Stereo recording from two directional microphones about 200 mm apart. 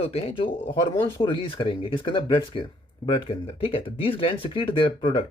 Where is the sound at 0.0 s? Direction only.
30° left (ahead or behind).